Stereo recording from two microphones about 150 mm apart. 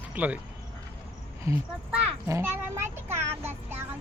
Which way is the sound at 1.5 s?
20° right (ahead or behind).